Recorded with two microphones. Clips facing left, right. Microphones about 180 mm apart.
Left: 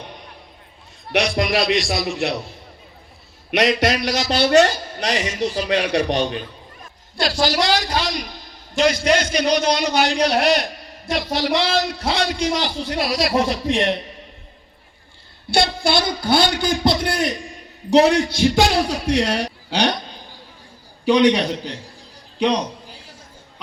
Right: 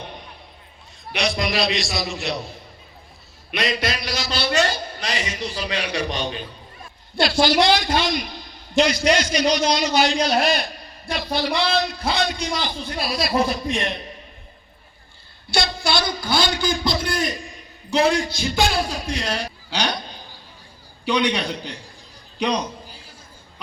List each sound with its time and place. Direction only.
1.1 s a man's voice: 55° left (ahead or behind)
3.5 s a man's voice: 70° left (ahead or behind)
4.2 s a man's voice: 50° left (ahead or behind)
7.2 s a woman's voice: 40° left (ahead or behind)
8.7 s a man's voice: 50° left (ahead or behind); by 10.7 s 70° left (ahead or behind)
11.1 s a man's voice: 85° left
15.4 s a man's voice: 55° left (ahead or behind)
21.0 s a man's voice: 45° left (ahead or behind)
22.4 s a man's voice: 25° left (ahead or behind)